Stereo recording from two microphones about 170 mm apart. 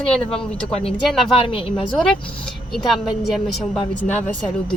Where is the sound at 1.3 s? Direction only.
30° left (ahead or behind).